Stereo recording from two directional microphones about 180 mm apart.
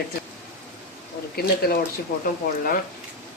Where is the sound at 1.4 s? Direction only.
60° left (ahead or behind).